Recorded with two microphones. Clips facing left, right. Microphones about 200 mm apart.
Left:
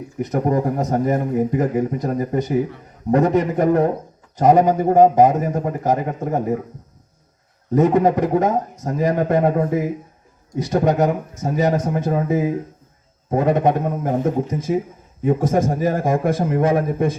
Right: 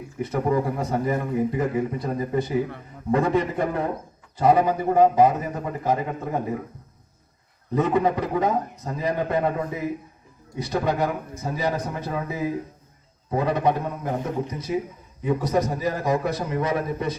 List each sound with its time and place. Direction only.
0.2 s speech: 40° left (ahead or behind)
7.7 s speech: 45° left (ahead or behind)